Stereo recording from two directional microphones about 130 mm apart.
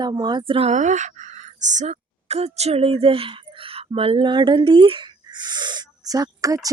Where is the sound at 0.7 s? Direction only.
70° right (ahead or behind).